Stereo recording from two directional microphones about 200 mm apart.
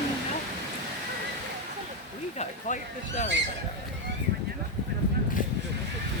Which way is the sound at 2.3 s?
35° left (ahead or behind).